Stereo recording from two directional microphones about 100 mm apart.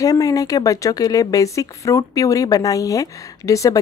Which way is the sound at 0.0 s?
35° left (ahead or behind).